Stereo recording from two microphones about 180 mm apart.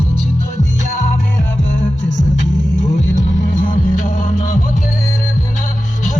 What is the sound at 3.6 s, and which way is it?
Music, 50° left (ahead or behind).